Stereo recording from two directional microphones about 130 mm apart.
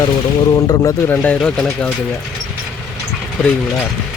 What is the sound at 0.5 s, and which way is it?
Speech, 25° left (ahead or behind).